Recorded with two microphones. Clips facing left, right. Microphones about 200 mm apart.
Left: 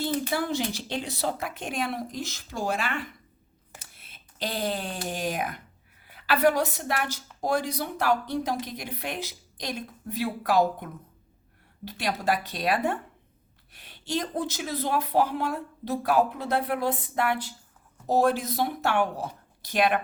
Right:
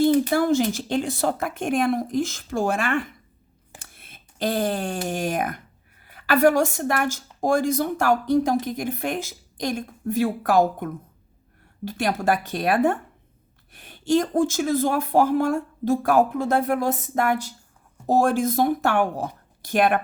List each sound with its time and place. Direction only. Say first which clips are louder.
0.0 s speech: right 9 dB; 50° right (ahead or behind)
11.9 s speech: right 5 dB; 50° right (ahead or behind)